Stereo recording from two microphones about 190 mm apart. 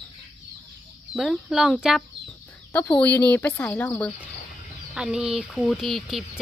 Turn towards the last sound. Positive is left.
turn(degrees=0)  # may be behind; listen again after turning